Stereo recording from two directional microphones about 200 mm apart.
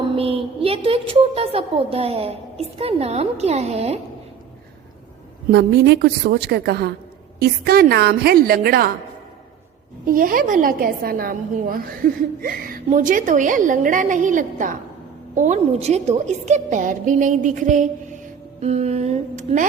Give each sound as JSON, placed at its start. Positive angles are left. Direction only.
{"t": 0.2, "sound": "a woman's voice", "side_deg": -30}
{"t": 5.5, "sound": "a woman's voice", "side_deg": -55}
{"t": 10.1, "sound": "a woman's voice", "side_deg": -45}